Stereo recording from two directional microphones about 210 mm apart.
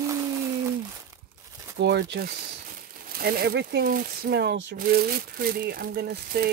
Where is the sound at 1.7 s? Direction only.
55° right (ahead or behind).